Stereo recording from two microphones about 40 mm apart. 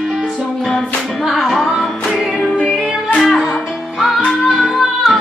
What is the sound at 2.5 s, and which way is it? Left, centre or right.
Music, left.